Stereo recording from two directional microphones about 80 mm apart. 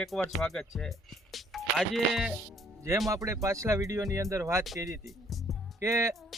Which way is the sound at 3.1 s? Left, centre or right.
Right.